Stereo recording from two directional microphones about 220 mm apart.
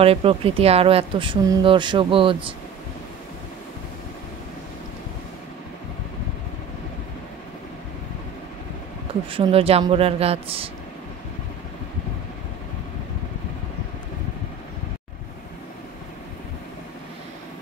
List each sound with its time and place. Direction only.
0.0 s speech: 25° right (ahead or behind)
9.3 s speech: 25° right (ahead or behind)